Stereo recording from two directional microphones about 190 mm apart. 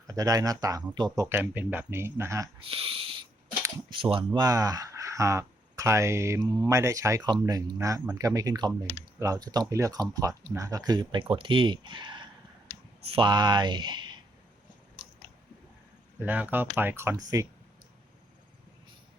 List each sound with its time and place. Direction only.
0.1 s speech: 20° right (ahead or behind)
2.6 s speech: 30° right (ahead or behind)
16.2 s speech: 10° right (ahead or behind)